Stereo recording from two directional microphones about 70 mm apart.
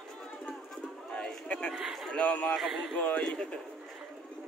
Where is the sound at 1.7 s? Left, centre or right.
Centre.